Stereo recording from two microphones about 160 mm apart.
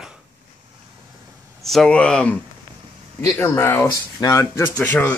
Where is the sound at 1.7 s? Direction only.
5° left (ahead or behind).